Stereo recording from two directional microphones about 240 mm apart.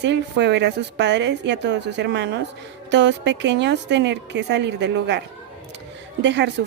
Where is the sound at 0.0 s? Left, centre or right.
Right.